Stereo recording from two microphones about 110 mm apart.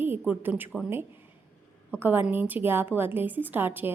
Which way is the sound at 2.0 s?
20° right (ahead or behind).